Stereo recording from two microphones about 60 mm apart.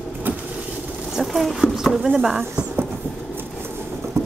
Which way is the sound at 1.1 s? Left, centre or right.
Centre.